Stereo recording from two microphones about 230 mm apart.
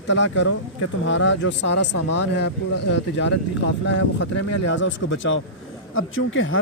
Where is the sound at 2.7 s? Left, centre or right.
Left.